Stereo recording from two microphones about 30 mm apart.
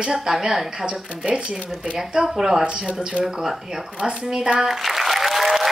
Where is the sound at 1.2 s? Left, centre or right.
Right.